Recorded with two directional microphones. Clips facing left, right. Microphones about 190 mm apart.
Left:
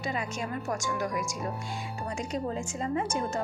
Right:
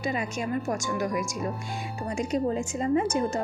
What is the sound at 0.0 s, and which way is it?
A woman's voice, 15° right (ahead or behind).